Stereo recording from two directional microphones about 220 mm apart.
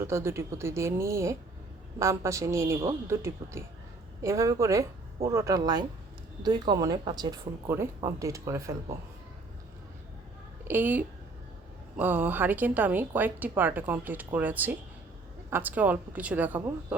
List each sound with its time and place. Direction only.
0.0 s speech: 10° right (ahead or behind)
10.7 s speech: 10° right (ahead or behind)